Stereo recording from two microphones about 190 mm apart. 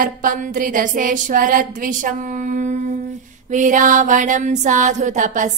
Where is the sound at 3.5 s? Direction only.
45° right (ahead or behind).